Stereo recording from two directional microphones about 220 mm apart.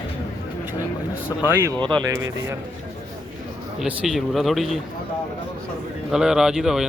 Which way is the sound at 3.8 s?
Centre (ahead or behind).